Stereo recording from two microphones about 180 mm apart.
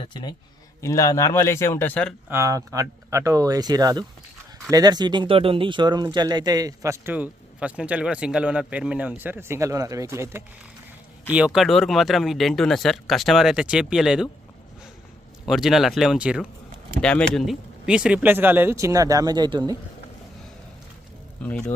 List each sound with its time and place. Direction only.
0.0 s a man's voice: 25° left (ahead or behind); by 2.1 s 10° left (ahead or behind)
2.3 s speech: 15° right (ahead or behind)
15.4 s speech: centre (ahead or behind)
17.0 s speech: 5° left (ahead or behind); by 19.7 s 25° right (ahead or behind)
21.4 s a man's voice: 10° left (ahead or behind)